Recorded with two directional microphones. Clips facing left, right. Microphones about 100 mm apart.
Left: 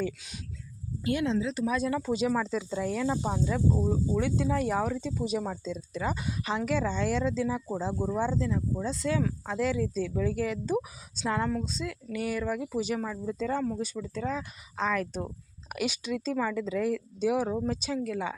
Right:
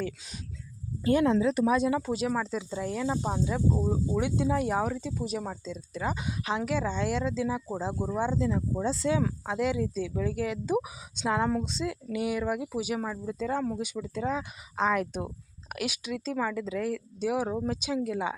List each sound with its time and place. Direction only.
1.2 s speech: 50° right (ahead or behind)
1.6 s speech: 25° right (ahead or behind)
1.9 s speech: 5° right (ahead or behind); by 9.0 s 30° right (ahead or behind)
9.0 s speech: 15° right (ahead or behind)
15.7 s speech: 5° right (ahead or behind)